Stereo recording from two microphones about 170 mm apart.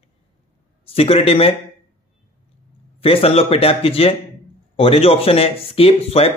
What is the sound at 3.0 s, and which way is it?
Speech, 35° left (ahead or behind).